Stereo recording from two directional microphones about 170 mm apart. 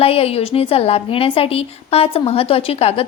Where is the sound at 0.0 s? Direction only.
35° left (ahead or behind).